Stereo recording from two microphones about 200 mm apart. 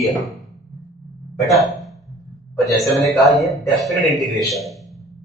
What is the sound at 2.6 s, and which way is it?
Speech, 15° left (ahead or behind).